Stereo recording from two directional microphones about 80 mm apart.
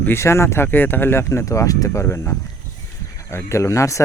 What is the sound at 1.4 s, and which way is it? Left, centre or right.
Speech, left.